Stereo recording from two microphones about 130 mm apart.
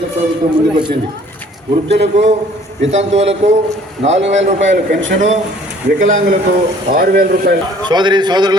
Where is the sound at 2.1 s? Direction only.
60° right (ahead or behind).